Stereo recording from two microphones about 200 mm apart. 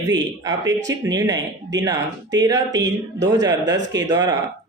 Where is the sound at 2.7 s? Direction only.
65° right (ahead or behind).